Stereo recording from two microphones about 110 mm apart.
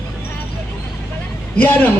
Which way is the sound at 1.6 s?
15° left (ahead or behind).